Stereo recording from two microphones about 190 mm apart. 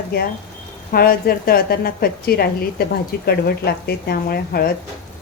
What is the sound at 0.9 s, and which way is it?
A woman's voice, 50° left (ahead or behind).